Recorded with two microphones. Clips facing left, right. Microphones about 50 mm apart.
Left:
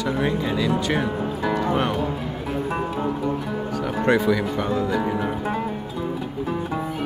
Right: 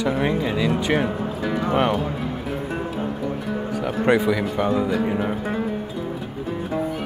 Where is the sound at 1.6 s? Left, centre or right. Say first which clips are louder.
Right 4 dB; centre.